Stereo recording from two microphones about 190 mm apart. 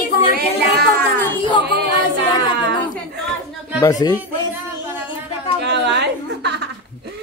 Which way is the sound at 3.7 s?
20° left (ahead or behind).